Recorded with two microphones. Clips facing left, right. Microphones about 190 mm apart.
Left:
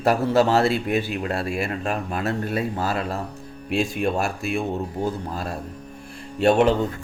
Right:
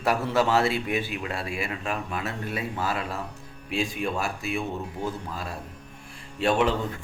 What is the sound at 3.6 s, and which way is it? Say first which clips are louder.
Speech: left 5 dB; 60° left (ahead or behind).